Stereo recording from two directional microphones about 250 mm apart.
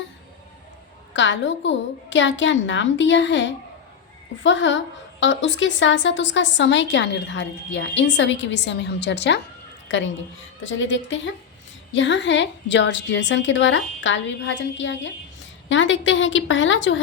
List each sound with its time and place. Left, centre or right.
1.1 s a woman's voice: left